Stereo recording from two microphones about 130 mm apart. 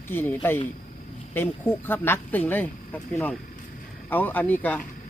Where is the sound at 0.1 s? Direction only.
15° left (ahead or behind).